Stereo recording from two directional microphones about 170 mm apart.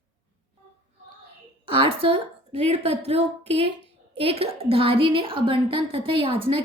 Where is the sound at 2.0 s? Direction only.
35° right (ahead or behind).